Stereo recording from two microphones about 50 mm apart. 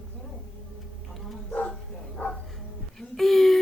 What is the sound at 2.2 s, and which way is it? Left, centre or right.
Bow-wow, left.